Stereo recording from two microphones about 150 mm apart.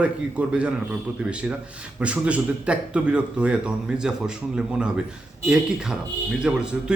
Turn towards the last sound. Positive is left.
turn(degrees=-5)  # may be behind; listen again after turning